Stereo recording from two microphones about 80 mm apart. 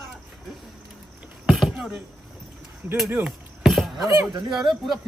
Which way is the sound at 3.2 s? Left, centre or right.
Centre.